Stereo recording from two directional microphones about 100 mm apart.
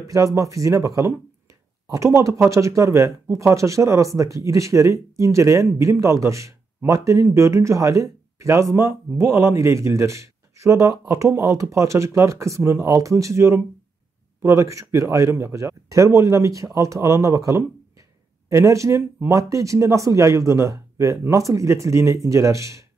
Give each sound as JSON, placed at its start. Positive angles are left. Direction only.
{"t": 0.0, "sound": "speech", "side_deg": -30}